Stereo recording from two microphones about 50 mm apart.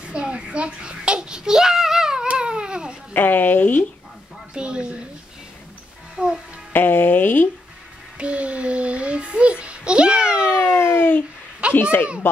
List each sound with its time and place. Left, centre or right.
0.0 s a sound: centre
2.2 s cat: right
3.1 s a woman's voice: left
4.6 s a woman's voice: right
6.1 s music: centre
6.7 s music: left
8.2 s child singing: right
10.7 s a sound: left
11.7 s speech: left